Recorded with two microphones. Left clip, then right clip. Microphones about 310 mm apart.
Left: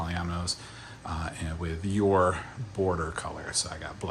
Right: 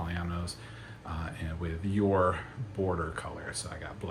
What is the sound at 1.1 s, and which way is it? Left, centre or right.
Speech, centre.